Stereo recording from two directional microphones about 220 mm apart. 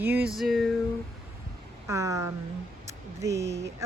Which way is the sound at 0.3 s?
Centre (ahead or behind).